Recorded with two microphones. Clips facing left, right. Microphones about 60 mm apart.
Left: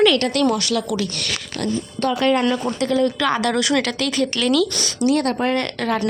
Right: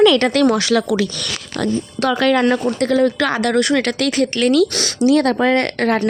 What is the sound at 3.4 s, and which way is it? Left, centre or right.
Speech, right.